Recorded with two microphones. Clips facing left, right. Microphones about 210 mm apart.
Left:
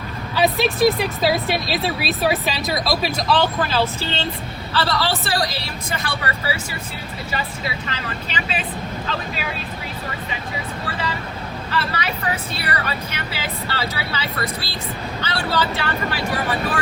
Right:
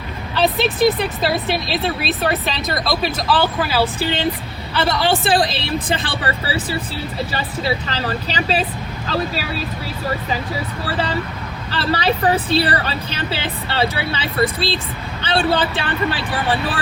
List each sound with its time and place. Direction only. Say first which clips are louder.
0.3 s speech: right 1 dB; centre (ahead or behind); by 9.6 s 35° right (ahead or behind)
10.8 s speech: right 7 dB; 30° right (ahead or behind)